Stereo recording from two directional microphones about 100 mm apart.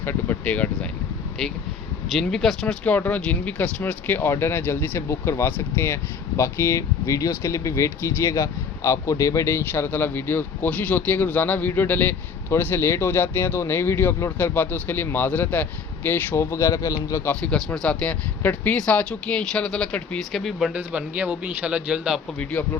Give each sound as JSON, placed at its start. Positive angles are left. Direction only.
{"t": 0.0, "sound": "speech", "side_deg": 20}
{"t": 2.1, "sound": "speech", "side_deg": 5}
{"t": 2.8, "sound": "speech", "side_deg": 15}
{"t": 17.2, "sound": "speech", "side_deg": 10}
{"t": 20.7, "sound": "a man's voice", "side_deg": -15}
{"t": 22.6, "sound": "speech", "side_deg": 15}